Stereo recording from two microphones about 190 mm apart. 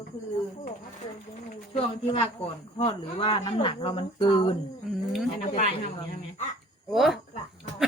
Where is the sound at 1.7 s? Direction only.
30° left (ahead or behind).